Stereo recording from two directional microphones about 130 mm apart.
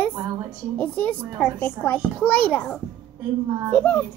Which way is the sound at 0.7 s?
15° left (ahead or behind).